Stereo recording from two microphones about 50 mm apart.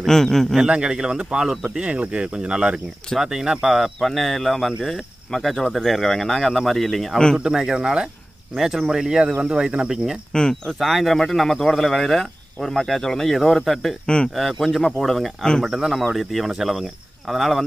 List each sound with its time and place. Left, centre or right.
0.0 s a man's voice: centre
0.7 s speech: centre
1.8 s speech: right; by 7.2 s centre
7.5 s speech: centre
10.3 s a man's voice: centre
10.7 s speech: centre
14.0 s speech: centre
14.3 s speech: centre